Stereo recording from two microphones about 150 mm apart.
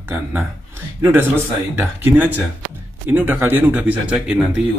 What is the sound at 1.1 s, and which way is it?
Speech, 15° right (ahead or behind).